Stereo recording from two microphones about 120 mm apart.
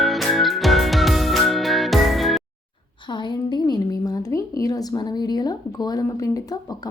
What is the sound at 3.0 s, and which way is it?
A woman's voice, 40° left (ahead or behind).